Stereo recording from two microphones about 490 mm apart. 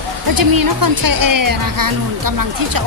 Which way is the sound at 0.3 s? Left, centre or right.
Right.